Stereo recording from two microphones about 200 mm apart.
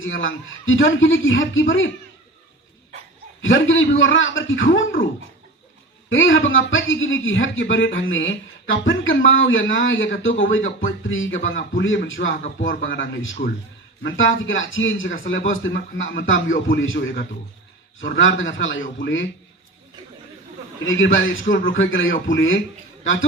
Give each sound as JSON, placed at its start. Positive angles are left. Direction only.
{"t": 0.0, "sound": "a man's voice", "side_deg": 75}
{"t": 3.4, "sound": "a man's voice", "side_deg": 75}
{"t": 6.1, "sound": "a man's voice", "side_deg": 75}
{"t": 12.3, "sound": "speech", "side_deg": 40}
{"t": 12.6, "sound": "a man's voice", "side_deg": 70}
{"t": 20.8, "sound": "a man's voice", "side_deg": 75}